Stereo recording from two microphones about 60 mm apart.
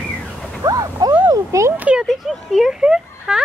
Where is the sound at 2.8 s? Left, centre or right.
Centre.